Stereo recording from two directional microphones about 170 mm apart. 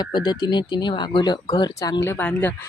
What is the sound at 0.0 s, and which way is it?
Speech, 25° left (ahead or behind).